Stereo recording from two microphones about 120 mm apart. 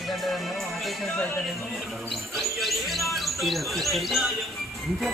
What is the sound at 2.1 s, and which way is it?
Speech, centre (ahead or behind).